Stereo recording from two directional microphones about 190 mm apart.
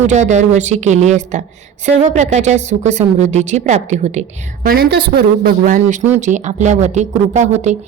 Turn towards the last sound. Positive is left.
turn(degrees=-40)  # may be behind; listen again after turning